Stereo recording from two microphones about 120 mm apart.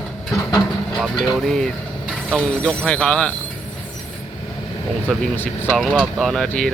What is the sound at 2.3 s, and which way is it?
Speech, 5° left (ahead or behind).